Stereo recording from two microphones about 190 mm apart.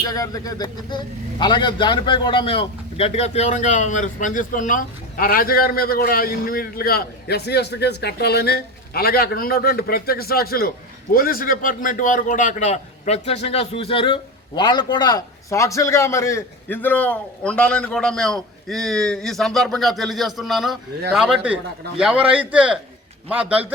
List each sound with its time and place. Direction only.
0.0 s a man's voice: 20° left (ahead or behind); by 23.7 s 10° right (ahead or behind)